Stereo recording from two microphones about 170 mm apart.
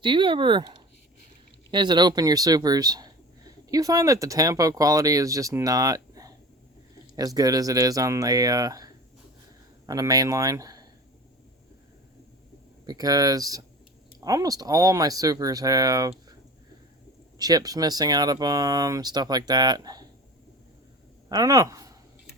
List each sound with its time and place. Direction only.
0.0 s speech: 30° right (ahead or behind)
12.8 s speech: 20° right (ahead or behind)
17.3 s speech: 20° right (ahead or behind)
21.2 s speech: 20° right (ahead or behind)